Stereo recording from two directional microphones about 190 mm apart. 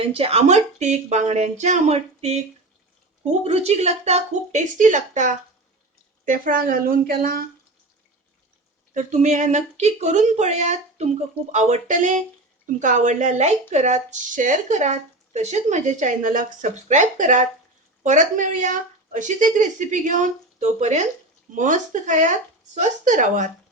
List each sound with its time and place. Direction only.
0.1 s speech: 30° right (ahead or behind); by 7.4 s 50° right (ahead or behind)
8.9 s speech: 40° right (ahead or behind)